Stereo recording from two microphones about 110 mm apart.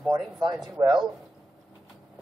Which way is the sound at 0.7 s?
45° right (ahead or behind).